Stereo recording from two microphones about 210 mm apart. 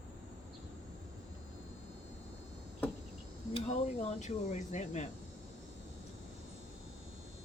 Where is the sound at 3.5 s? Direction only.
30° left (ahead or behind).